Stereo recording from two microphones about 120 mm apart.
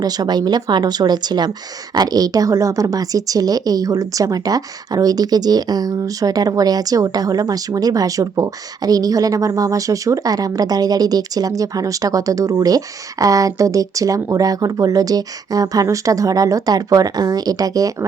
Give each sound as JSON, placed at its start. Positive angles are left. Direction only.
{"t": 0.0, "sound": "speech", "side_deg": -35}